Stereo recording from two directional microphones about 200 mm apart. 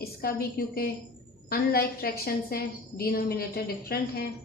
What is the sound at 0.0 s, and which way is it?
A woman's voice, 50° left (ahead or behind).